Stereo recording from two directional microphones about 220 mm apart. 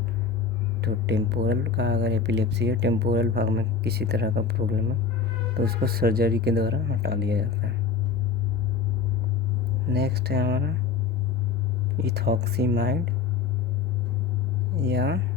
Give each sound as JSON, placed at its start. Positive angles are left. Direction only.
{"t": 0.8, "sound": "speech", "side_deg": -50}
{"t": 9.9, "sound": "speech", "side_deg": -45}
{"t": 12.0, "sound": "speech", "side_deg": -45}
{"t": 14.8, "sound": "speech", "side_deg": -45}